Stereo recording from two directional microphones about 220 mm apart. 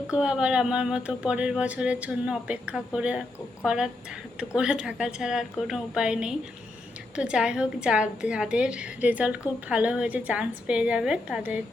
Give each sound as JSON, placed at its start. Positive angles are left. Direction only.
{"t": 0.1, "sound": "speech", "side_deg": -5}